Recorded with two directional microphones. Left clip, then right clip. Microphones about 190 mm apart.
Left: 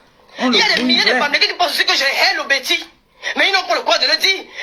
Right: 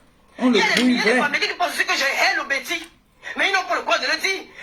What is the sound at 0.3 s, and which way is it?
Speech, 35° left (ahead or behind).